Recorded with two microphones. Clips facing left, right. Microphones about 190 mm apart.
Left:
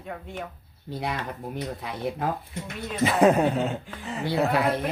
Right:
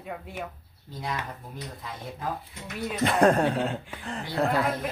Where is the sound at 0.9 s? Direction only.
70° left (ahead or behind).